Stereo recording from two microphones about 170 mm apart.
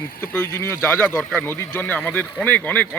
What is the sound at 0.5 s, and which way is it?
Speech, 15° left (ahead or behind).